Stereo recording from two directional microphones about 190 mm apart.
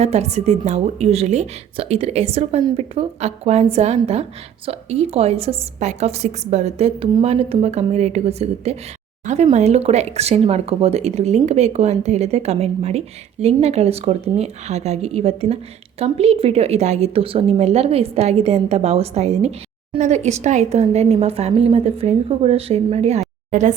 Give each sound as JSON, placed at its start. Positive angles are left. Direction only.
{"t": 0.0, "sound": "a woman's voice", "side_deg": -35}